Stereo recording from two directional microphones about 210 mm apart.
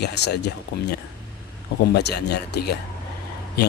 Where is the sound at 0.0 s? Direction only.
50° left (ahead or behind).